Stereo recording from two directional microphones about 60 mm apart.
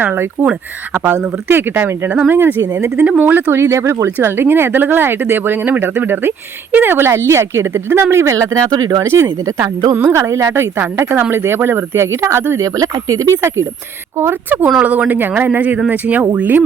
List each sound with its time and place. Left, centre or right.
0.0 s speech: right
3.6 s speech: right
8.1 s speech: right
9.0 s speech: right
9.9 s speech: right
10.2 s speech: right
12.5 s speech: right
14.2 s speech: right
14.8 s speech: right